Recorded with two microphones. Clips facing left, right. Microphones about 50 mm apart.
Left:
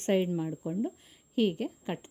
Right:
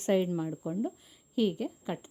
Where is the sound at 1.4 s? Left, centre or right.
Left.